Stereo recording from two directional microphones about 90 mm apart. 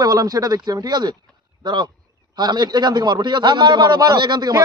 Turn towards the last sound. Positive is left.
turn(degrees=-55)  # may be behind; listen again after turning